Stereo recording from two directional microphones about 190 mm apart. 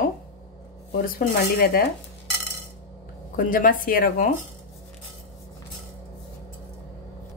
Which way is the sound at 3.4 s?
45° left (ahead or behind).